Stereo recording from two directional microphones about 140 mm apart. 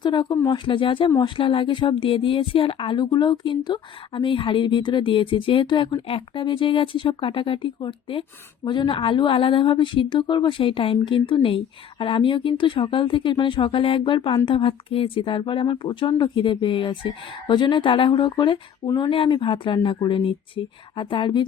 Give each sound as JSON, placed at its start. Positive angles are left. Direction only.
{"t": 0.0, "sound": "a woman's voice", "side_deg": 30}